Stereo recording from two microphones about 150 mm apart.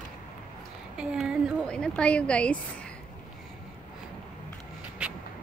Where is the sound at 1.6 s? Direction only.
5° left (ahead or behind).